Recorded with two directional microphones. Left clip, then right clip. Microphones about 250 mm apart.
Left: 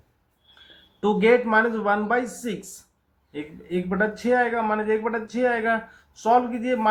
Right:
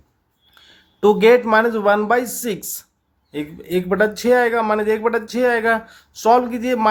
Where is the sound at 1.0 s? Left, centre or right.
Right.